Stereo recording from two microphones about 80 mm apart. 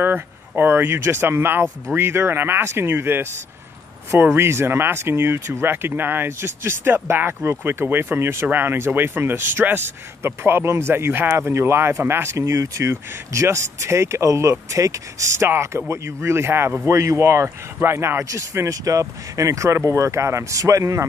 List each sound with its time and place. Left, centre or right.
0.0 s speech: right